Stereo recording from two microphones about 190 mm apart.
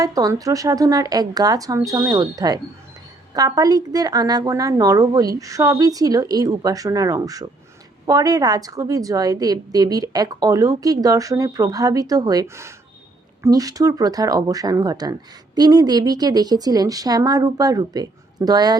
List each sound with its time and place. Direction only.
0.0 s a woman's voice: 20° right (ahead or behind)